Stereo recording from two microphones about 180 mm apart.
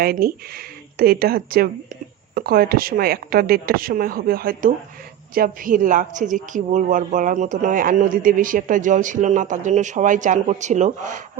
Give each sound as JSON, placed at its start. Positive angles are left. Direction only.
{"t": 0.0, "sound": "speech", "side_deg": -55}